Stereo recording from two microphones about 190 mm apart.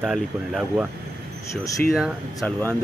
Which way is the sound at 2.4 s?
5° left (ahead or behind).